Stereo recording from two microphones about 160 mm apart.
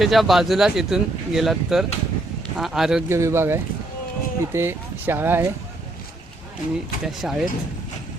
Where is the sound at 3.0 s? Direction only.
15° right (ahead or behind).